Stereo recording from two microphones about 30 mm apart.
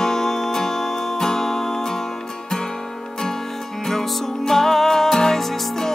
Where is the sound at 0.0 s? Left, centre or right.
Centre.